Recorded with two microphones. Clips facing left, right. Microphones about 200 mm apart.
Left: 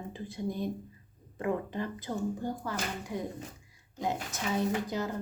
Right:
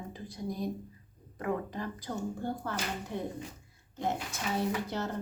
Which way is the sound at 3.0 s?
10° left (ahead or behind).